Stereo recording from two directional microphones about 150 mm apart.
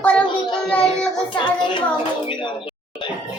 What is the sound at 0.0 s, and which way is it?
Child singing, 10° left (ahead or behind).